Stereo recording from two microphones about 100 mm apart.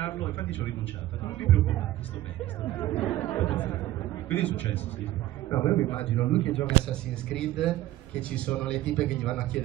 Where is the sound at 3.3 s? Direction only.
20° left (ahead or behind).